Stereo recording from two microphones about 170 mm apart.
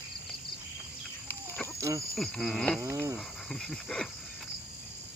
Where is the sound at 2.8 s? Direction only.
15° right (ahead or behind).